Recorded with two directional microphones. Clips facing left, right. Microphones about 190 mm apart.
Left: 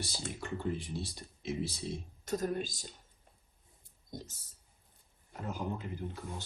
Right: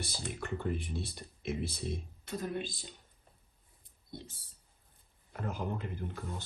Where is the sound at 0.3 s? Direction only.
55° right (ahead or behind).